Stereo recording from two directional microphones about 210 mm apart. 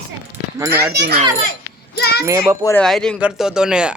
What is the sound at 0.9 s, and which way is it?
Speech, 50° right (ahead or behind).